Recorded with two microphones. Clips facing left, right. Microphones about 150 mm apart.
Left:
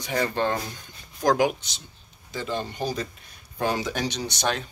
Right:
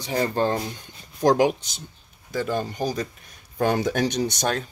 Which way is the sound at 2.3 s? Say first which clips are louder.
Right 4 dB; 45° right (ahead or behind).